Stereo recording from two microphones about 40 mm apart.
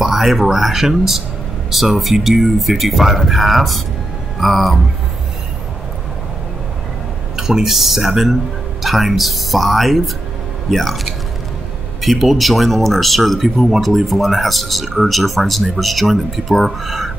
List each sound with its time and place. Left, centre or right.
0.0 s speech: centre
7.3 s speech: centre
12.0 s speech: centre